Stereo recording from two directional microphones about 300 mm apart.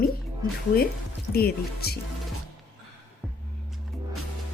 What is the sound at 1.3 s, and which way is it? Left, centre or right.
Speech, left.